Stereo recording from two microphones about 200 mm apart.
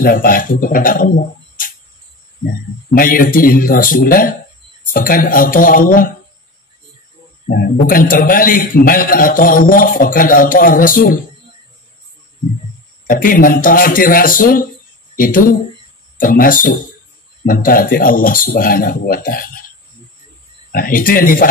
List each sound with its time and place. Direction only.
0.0 s a man's voice: 45° left (ahead or behind)
7.4 s a man's voice: 45° left (ahead or behind)
13.0 s a man's voice: 45° left (ahead or behind)
20.7 s a man's voice: 45° left (ahead or behind)